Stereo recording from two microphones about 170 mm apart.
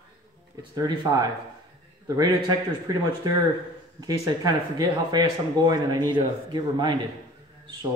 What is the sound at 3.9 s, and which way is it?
Speech, 20° right (ahead or behind).